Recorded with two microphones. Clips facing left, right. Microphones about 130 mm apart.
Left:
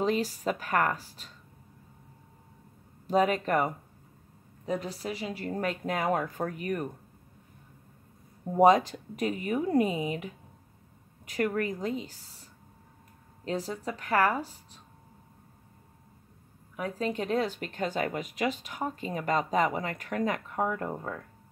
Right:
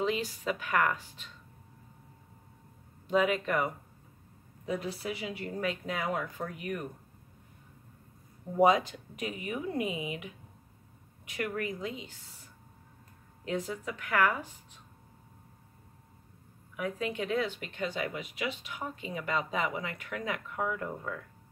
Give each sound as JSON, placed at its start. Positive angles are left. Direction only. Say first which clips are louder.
{"t": 0.0, "sound": "speech", "louder": "left 4 dB", "side_deg": 40}
{"t": 3.1, "sound": "a woman's voice", "louder": "left 3 dB", "side_deg": 40}
{"t": 8.5, "sound": "speech", "louder": "left 4 dB", "side_deg": 40}
{"t": 13.5, "sound": "speech", "louder": "left 2 dB", "side_deg": 35}
{"t": 16.7, "sound": "speech", "louder": "left 2 dB", "side_deg": 35}